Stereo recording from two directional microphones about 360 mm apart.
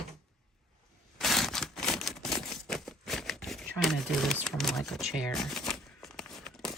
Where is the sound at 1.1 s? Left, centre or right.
Centre.